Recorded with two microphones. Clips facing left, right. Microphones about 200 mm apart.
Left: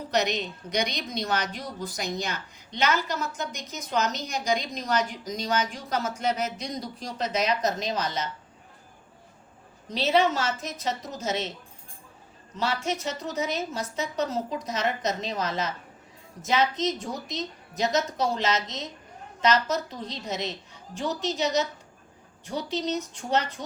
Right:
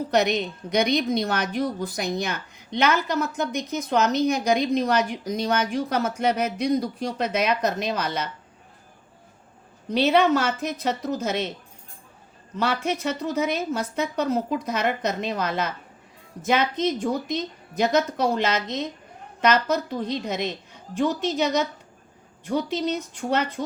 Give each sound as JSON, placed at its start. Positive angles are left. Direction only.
{"t": 0.1, "sound": "a woman's voice", "side_deg": -55}
{"t": 9.9, "sound": "a woman's voice", "side_deg": -60}
{"t": 12.5, "sound": "a woman's voice", "side_deg": -60}